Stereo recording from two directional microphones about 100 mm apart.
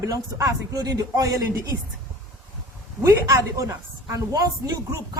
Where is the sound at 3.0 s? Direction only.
35° right (ahead or behind).